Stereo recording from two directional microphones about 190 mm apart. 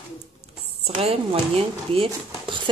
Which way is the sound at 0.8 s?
30° right (ahead or behind).